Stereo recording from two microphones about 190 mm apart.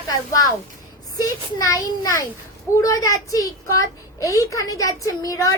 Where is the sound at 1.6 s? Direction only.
20° left (ahead or behind).